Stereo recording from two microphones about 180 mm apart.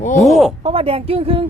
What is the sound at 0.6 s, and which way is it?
Speech, 30° right (ahead or behind).